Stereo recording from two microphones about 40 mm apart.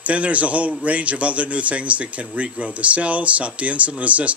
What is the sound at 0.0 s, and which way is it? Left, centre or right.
Speech, right.